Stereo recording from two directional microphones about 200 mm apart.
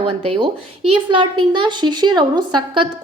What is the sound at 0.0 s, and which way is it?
A woman's voice, 25° right (ahead or behind).